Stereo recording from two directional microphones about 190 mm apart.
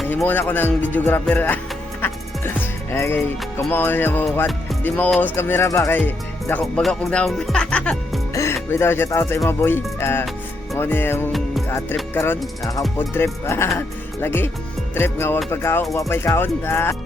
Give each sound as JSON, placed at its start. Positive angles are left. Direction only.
{"t": 0.1, "sound": "speech", "side_deg": 10}
{"t": 2.0, "sound": "music", "side_deg": 10}
{"t": 4.4, "sound": "speech", "side_deg": 5}
{"t": 8.3, "sound": "music", "side_deg": 15}
{"t": 8.7, "sound": "speech", "side_deg": 10}
{"t": 11.3, "sound": "music", "side_deg": 0}
{"t": 12.1, "sound": "speech", "side_deg": 10}